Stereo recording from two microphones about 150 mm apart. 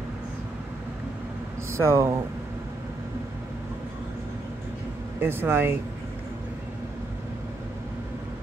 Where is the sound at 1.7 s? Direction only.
20° right (ahead or behind).